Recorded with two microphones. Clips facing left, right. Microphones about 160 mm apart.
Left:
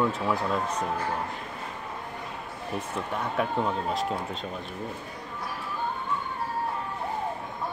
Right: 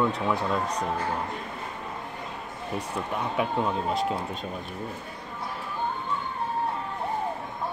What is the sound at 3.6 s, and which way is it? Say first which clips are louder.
Speech: right 1 dB; centre (ahead or behind).